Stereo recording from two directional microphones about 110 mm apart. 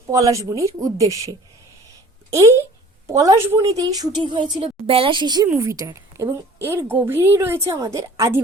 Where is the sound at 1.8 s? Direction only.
30° right (ahead or behind).